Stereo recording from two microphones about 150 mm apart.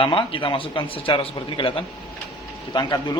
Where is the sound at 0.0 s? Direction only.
35° left (ahead or behind).